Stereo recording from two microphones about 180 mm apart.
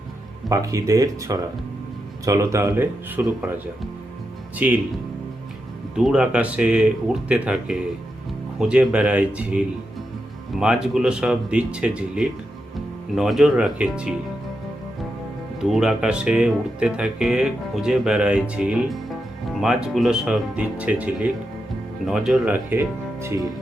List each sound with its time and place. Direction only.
0.4 s speech: 20° right (ahead or behind)
4.5 s speech: 10° right (ahead or behind)
6.0 s speech: 5° right (ahead or behind)
15.7 s speech: 5° right (ahead or behind)